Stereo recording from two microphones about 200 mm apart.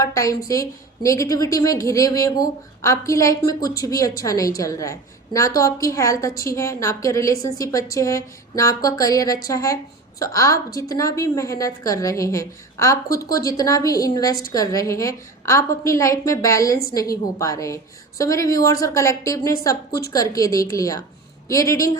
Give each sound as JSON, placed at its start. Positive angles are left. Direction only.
{"t": 0.0, "sound": "a woman's voice", "side_deg": 15}